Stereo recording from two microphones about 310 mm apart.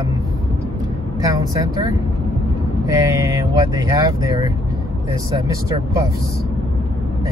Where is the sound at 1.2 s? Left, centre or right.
Centre.